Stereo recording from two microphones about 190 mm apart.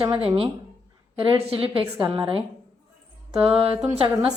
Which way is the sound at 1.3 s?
25° right (ahead or behind).